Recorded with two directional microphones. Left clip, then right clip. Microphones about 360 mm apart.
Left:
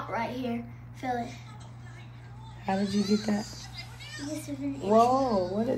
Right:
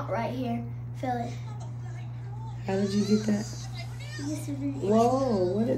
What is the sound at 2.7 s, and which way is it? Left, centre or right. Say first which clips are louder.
Speech: right 1 dB; centre.